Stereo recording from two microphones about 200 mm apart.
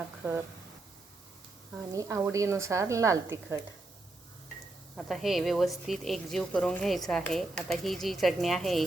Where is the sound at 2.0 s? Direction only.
15° right (ahead or behind).